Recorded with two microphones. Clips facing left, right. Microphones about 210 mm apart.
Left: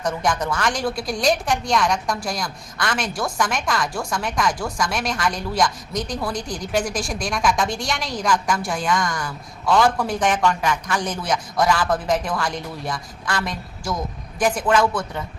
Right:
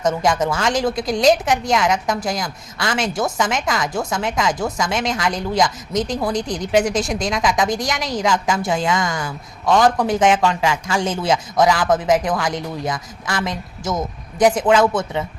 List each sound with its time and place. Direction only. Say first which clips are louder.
0.0 s a woman's voice: right 5 dB; 25° right (ahead or behind)
7.4 s a woman's voice: right 1 dB; 90° right
7.7 s a woman's voice: right 4 dB; 20° right (ahead or behind)